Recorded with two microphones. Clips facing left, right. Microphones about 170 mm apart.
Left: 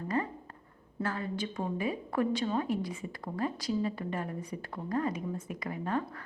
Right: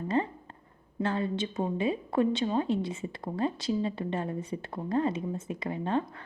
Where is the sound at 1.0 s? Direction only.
25° right (ahead or behind).